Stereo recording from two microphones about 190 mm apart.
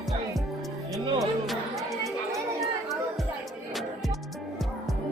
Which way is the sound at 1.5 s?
Centre (ahead or behind).